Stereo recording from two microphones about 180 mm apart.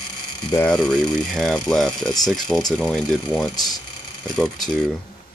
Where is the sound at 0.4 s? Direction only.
20° left (ahead or behind).